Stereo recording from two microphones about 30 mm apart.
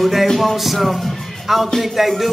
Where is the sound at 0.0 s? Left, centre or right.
Centre.